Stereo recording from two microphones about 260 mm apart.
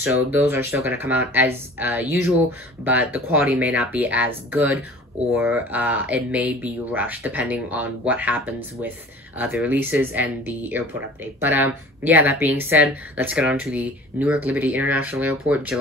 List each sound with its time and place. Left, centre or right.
0.0 s speech: centre